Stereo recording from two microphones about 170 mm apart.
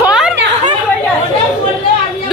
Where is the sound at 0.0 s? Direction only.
5° right (ahead or behind).